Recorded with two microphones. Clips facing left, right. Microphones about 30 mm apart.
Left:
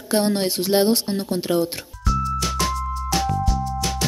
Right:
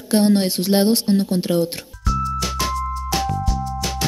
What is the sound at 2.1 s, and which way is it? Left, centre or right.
Music, centre.